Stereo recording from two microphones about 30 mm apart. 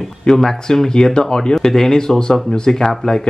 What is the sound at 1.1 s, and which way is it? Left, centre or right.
Speech, left.